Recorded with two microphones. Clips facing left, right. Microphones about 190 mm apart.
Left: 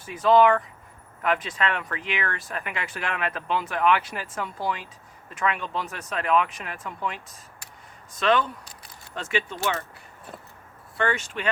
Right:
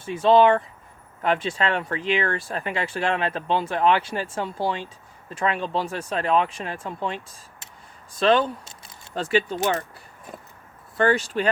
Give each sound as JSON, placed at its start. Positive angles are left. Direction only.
{"t": 0.0, "sound": "speech", "side_deg": -30}
{"t": 10.9, "sound": "speech", "side_deg": -35}